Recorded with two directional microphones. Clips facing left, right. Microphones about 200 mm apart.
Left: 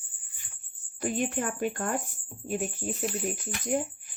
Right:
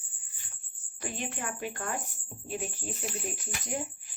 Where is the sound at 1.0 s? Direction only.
50° left (ahead or behind).